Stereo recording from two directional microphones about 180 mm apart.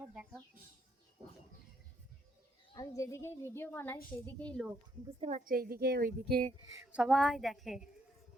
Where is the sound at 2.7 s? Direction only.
20° left (ahead or behind).